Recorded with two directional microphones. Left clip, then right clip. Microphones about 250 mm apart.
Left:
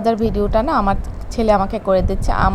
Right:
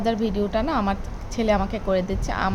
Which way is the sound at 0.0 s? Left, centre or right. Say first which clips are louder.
Left 6 dB; centre.